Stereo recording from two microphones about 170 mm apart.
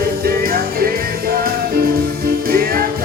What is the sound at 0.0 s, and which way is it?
Music, 65° right (ahead or behind).